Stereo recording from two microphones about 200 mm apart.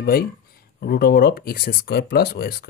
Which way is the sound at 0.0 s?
50° left (ahead or behind).